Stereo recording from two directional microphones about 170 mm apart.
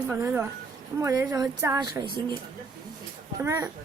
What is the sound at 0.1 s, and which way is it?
A woman's voice, 10° right (ahead or behind).